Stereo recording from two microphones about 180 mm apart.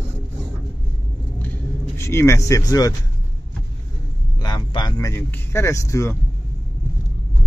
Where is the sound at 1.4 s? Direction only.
10° left (ahead or behind).